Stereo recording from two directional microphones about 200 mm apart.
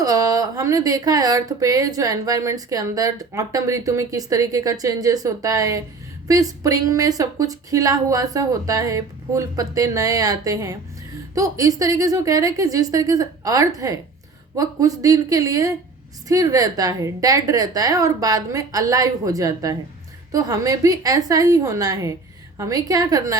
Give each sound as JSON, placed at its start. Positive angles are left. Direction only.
{"t": 0.0, "sound": "speech", "side_deg": -20}